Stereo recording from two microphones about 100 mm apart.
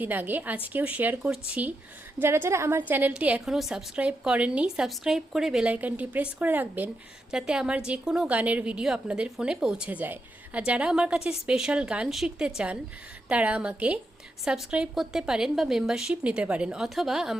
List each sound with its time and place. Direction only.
0.0 s a woman's voice: 20° right (ahead or behind)
2.2 s a woman's voice: 25° right (ahead or behind); by 5.7 s 5° right (ahead or behind)
5.7 s a woman's voice: 15° right (ahead or behind)